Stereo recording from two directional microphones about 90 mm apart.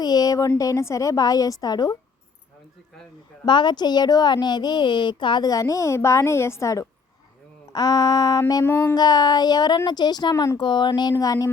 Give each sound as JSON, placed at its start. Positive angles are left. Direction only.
{"t": 0.0, "sound": "a woman's voice", "side_deg": 45}
{"t": 3.4, "sound": "a woman's voice", "side_deg": 60}
{"t": 8.6, "sound": "music", "side_deg": 25}
{"t": 9.0, "sound": "a woman's voice", "side_deg": 50}
{"t": 10.6, "sound": "speech", "side_deg": 55}
{"t": 11.2, "sound": "a woman's voice", "side_deg": 40}